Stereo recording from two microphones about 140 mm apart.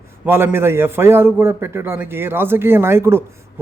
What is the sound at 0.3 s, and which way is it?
Speech, 15° right (ahead or behind).